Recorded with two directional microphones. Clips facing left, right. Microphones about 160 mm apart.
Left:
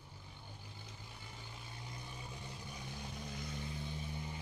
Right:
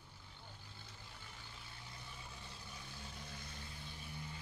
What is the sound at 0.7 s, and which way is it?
Vehicle, 15° left (ahead or behind).